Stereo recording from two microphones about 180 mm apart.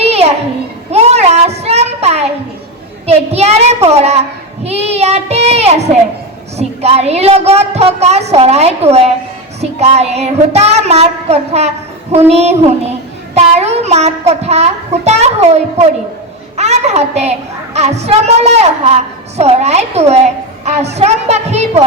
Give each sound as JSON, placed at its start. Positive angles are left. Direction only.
{"t": 0.0, "sound": "children playing", "side_deg": -35}
{"t": 0.9, "sound": "a sound", "side_deg": -35}
{"t": 3.1, "sound": "child singing", "side_deg": -35}
{"t": 6.6, "sound": "a child's voice", "side_deg": -35}